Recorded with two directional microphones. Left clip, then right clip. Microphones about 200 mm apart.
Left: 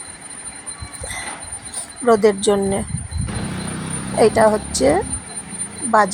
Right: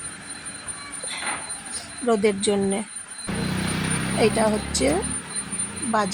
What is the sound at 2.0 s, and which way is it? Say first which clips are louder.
Speech: left 7 dB; 10° left (ahead or behind).